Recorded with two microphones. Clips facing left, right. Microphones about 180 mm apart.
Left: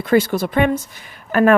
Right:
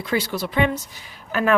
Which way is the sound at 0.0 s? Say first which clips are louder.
Left 8 dB; 50° left (ahead or behind).